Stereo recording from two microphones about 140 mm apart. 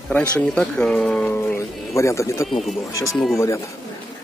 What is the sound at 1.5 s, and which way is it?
Speech, 20° left (ahead or behind).